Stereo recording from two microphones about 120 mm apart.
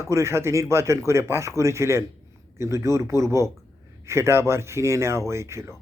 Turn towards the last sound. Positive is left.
turn(degrees=-25)  # may be behind; listen again after turning